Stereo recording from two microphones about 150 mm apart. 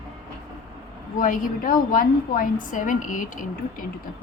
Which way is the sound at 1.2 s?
65° left (ahead or behind).